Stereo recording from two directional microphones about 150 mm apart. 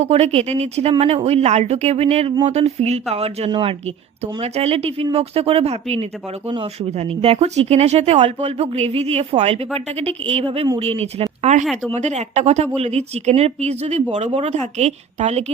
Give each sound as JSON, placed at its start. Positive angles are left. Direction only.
{"t": 0.0, "sound": "speech", "side_deg": -45}